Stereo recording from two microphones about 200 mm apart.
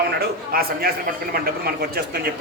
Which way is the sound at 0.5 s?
50° right (ahead or behind).